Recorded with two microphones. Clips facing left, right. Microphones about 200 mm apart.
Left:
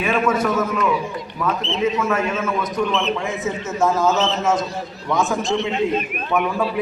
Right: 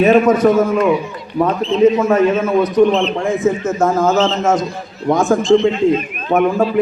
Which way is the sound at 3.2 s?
50° right (ahead or behind).